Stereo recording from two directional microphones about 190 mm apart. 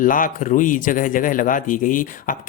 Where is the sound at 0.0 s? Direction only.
45° left (ahead or behind).